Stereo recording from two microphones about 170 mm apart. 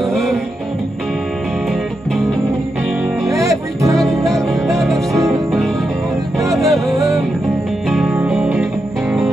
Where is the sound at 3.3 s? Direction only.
20° right (ahead or behind).